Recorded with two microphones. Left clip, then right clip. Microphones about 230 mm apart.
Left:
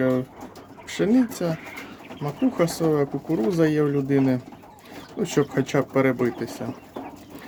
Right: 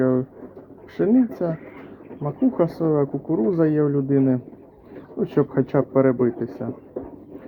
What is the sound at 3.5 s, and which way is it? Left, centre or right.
Speech, centre.